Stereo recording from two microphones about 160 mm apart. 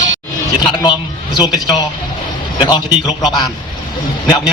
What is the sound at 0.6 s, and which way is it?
A man's voice, 25° left (ahead or behind).